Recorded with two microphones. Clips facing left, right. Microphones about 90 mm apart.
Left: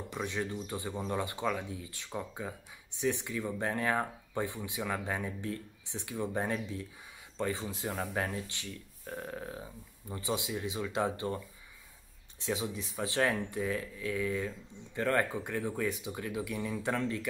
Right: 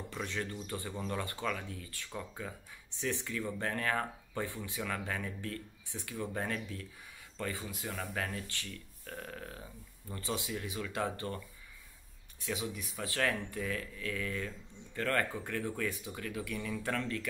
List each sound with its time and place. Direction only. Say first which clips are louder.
0.1 s speech: left 4 dB; 15° left (ahead or behind)